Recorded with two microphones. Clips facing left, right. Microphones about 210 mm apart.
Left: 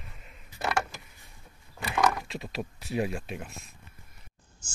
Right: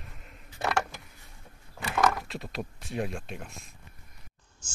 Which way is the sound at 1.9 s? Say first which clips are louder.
Even; centre (ahead or behind).